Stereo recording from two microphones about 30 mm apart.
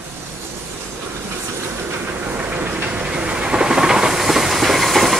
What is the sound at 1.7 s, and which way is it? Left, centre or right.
Train, right.